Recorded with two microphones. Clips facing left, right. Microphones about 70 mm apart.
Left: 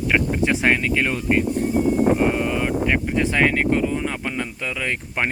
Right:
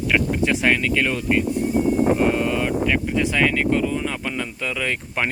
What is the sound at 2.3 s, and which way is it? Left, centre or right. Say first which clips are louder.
Wind: right 1 dB; centre.